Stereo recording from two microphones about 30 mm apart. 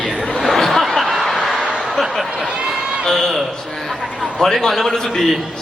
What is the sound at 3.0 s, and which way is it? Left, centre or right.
A man's voice, centre.